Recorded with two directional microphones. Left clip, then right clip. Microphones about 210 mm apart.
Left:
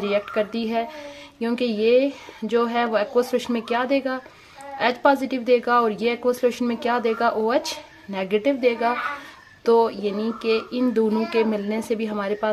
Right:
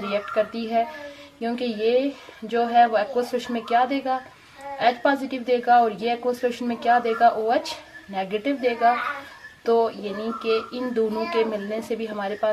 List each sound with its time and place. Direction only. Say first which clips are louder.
0.0 s a woman's voice: left 1 dB; 50° left (ahead or behind)